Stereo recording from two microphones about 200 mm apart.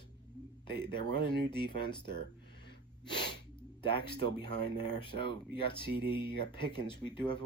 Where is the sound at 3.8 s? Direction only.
25° left (ahead or behind).